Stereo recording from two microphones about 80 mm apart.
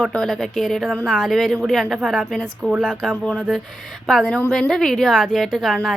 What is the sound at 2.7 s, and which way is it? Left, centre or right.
Speech, centre.